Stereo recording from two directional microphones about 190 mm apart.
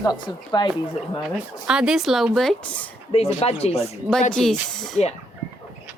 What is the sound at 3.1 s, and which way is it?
Speech, 30° left (ahead or behind).